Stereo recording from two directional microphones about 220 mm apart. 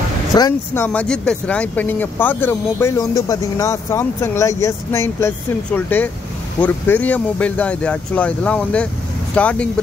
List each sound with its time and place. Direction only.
0.4 s speech: 15° left (ahead or behind)